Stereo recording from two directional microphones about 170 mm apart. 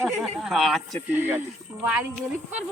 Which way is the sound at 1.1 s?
10° right (ahead or behind).